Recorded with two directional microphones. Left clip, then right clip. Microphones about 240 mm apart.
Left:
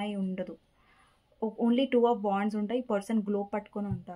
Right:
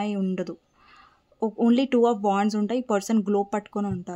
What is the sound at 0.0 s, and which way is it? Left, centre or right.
Speech, right.